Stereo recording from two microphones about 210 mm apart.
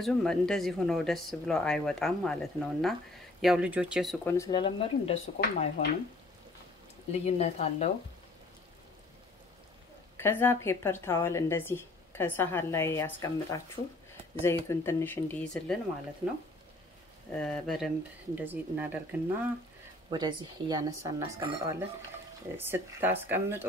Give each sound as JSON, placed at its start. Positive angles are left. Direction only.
{"t": 0.0, "sound": "speech", "side_deg": 0}
{"t": 4.3, "sound": "speech", "side_deg": 15}
{"t": 7.1, "sound": "speech", "side_deg": 30}
{"t": 10.1, "sound": "a woman's voice", "side_deg": 10}
{"t": 17.3, "sound": "speech", "side_deg": 0}
{"t": 20.1, "sound": "speech", "side_deg": -20}
{"t": 22.6, "sound": "speech", "side_deg": -10}